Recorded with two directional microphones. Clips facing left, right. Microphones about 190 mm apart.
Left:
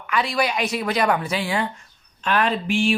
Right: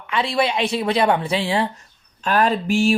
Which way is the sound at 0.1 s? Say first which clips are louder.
Right 2 dB; 30° right (ahead or behind).